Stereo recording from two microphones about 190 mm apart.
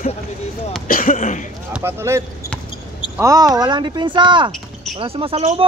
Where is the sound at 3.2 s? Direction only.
20° right (ahead or behind).